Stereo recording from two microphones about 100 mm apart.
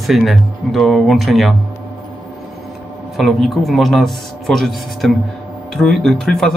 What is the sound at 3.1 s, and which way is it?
Speech, centre (ahead or behind).